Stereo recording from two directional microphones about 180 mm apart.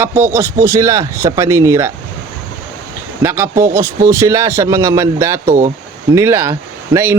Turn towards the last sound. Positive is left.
turn(degrees=-15)  # may be behind; listen again after turning